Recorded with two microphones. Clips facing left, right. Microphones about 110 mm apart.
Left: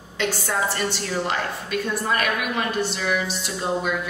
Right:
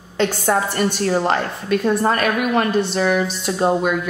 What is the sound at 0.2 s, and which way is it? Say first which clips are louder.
A woman's voice: right 6 dB; 50° right (ahead or behind).